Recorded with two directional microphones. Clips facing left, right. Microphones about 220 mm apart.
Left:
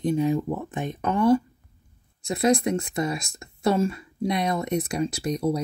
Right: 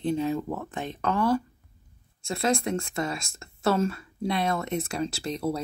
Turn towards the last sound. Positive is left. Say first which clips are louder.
# left 4 dB
turn(degrees=15)  # may be behind; listen again after turning